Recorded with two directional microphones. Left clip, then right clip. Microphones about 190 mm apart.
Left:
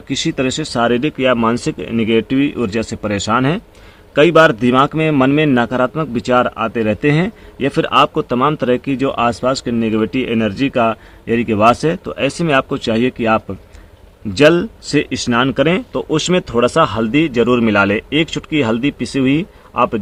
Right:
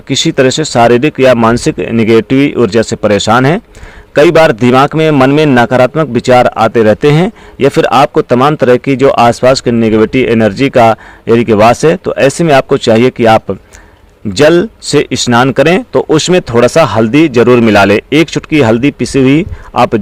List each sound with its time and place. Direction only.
0.1 s a man's voice: 40° right (ahead or behind)